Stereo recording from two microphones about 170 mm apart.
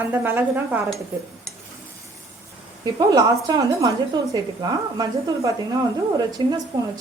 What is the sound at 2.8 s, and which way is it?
A woman's voice, 25° right (ahead or behind).